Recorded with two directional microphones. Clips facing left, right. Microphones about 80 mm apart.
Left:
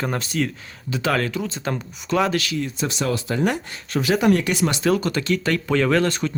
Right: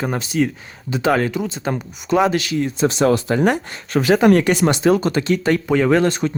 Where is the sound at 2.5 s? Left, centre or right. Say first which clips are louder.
Right 7 dB; right; by 6.1 s centre.